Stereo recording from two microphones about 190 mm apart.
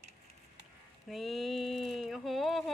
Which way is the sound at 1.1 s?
Centre (ahead or behind).